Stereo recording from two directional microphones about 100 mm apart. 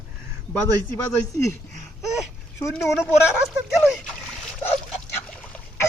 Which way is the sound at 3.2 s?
10° right (ahead or behind).